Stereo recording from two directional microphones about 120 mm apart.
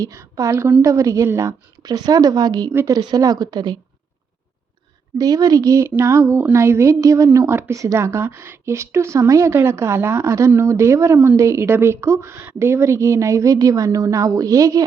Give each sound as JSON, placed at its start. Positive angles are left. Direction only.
{"t": 0.0, "sound": "a woman's voice", "side_deg": -25}
{"t": 5.1, "sound": "speech", "side_deg": -30}